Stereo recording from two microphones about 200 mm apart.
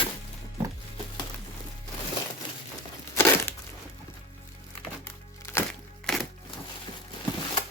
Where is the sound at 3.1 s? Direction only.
10° left (ahead or behind).